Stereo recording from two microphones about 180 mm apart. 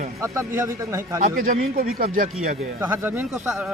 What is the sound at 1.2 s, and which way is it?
Speech, 50° right (ahead or behind).